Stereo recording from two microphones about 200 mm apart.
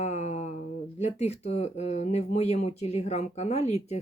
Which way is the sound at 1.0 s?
35° left (ahead or behind).